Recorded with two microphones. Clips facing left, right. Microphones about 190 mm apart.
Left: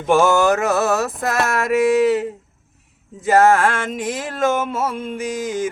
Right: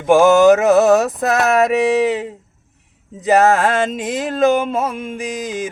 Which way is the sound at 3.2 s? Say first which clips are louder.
Right 1 dB; 15° right (ahead or behind).